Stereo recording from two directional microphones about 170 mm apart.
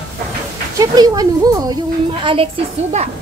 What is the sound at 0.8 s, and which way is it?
A woman's voice, 20° right (ahead or behind).